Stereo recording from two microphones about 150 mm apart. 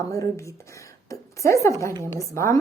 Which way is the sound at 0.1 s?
20° left (ahead or behind).